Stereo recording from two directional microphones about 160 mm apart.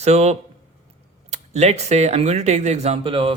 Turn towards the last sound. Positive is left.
turn(degrees=-35)  # may be behind; listen again after turning